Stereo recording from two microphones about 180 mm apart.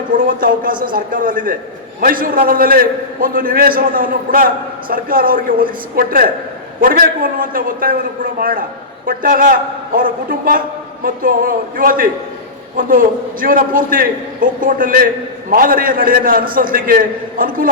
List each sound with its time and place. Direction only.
0.1 s a man's voice: 50° right (ahead or behind)